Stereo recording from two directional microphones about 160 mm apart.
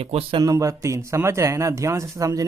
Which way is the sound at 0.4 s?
20° right (ahead or behind).